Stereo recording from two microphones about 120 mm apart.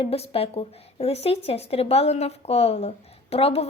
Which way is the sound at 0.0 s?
55° left (ahead or behind).